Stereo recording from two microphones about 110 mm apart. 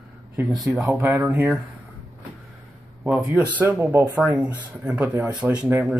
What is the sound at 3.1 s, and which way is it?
Speech, 15° right (ahead or behind).